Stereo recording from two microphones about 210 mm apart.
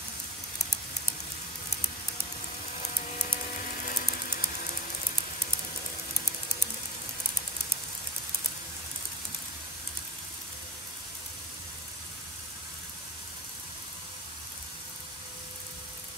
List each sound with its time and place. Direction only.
3.5 s music: 40° left (ahead or behind)